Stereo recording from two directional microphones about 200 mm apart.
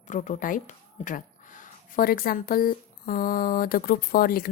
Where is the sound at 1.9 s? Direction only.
45° left (ahead or behind).